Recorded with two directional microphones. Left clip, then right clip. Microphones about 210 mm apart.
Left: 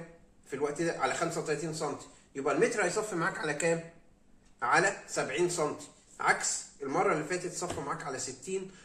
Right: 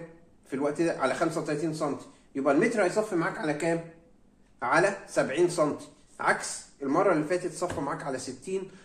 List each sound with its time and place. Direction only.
0.5 s speech: 25° right (ahead or behind)